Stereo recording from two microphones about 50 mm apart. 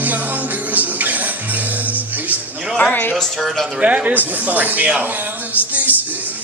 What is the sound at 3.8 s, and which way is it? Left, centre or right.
A man's voice, right.